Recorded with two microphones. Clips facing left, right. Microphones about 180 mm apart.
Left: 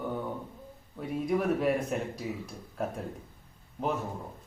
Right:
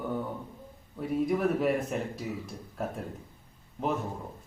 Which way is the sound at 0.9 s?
Centre (ahead or behind).